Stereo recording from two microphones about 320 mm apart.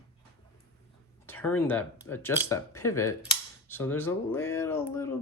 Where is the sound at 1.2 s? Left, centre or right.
Centre.